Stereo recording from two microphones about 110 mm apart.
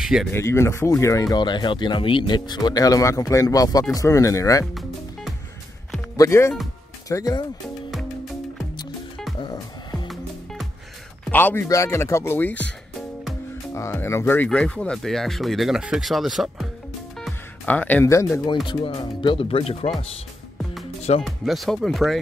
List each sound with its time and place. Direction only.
0.0 s speech: 5° right (ahead or behind)
0.3 s speech: 25° left (ahead or behind)
1.4 s speech: 45° left (ahead or behind)
6.1 s speech: 25° left (ahead or behind)
9.5 s music: 40° left (ahead or behind)
10.0 s music: centre (ahead or behind)
11.2 s speech: 20° left (ahead or behind)
13.7 s speech: 25° left (ahead or behind); by 16.6 s centre (ahead or behind)
17.6 s speech: 15° left (ahead or behind)
18.0 s speech: 25° left (ahead or behind)
18.9 s speech: 55° left (ahead or behind)
21.2 s speech: centre (ahead or behind)